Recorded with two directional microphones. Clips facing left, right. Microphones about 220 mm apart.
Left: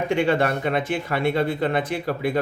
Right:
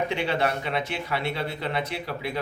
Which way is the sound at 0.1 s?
50° left (ahead or behind).